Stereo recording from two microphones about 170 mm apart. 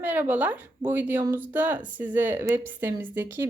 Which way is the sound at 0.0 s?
10° right (ahead or behind).